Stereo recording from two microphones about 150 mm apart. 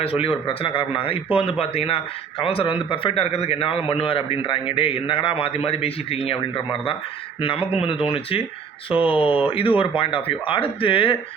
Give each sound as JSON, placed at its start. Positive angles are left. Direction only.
{"t": 0.0, "sound": "a man's voice", "side_deg": 40}